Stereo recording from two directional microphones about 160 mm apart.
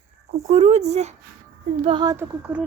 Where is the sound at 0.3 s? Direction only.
45° right (ahead or behind).